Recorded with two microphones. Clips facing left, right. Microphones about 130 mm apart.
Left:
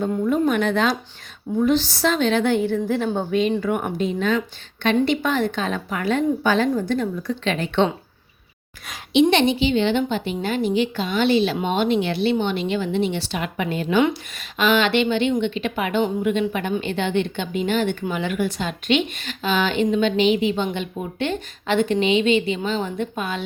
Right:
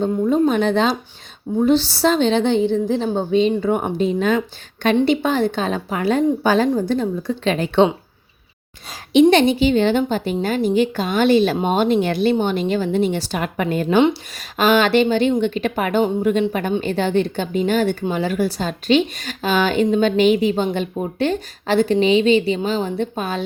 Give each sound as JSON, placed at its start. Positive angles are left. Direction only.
{"t": 0.3, "sound": "a woman's voice", "side_deg": -30}
{"t": 9.3, "sound": "speech", "side_deg": -40}
{"t": 14.0, "sound": "speech", "side_deg": -35}